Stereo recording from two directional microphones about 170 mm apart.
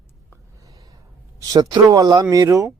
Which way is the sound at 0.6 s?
20° right (ahead or behind).